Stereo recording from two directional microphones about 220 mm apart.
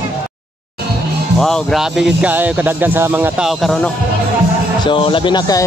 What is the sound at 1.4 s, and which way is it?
Speech, centre (ahead or behind).